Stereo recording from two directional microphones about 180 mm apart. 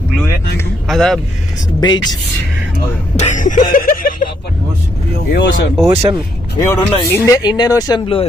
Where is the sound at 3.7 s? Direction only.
50° left (ahead or behind).